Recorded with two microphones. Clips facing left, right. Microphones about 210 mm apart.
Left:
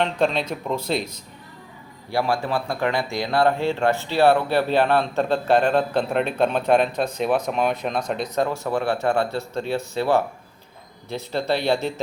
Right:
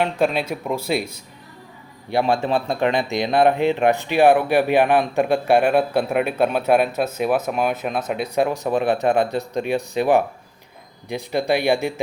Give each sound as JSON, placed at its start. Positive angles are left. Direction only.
{"t": 0.0, "sound": "speech", "side_deg": -10}
{"t": 2.0, "sound": "speech", "side_deg": -20}